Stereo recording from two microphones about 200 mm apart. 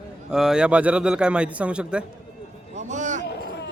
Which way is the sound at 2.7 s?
35° right (ahead or behind).